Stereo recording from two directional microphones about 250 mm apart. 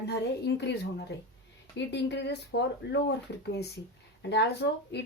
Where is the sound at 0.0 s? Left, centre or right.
Left.